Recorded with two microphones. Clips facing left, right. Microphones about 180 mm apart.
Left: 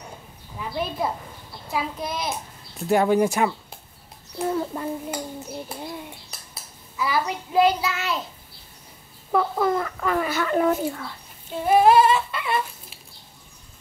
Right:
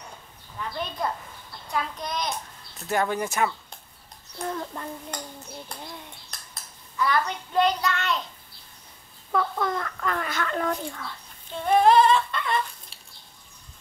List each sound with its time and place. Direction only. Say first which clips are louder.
0.6 s a child's voice: left 4 dB; 5° left (ahead or behind)
6.3 s child singing: left 2 dB; 5° left (ahead or behind)
9.3 s speech: left 5 dB; 10° left (ahead or behind)
11.5 s a sound: left 2 dB; 5° left (ahead or behind)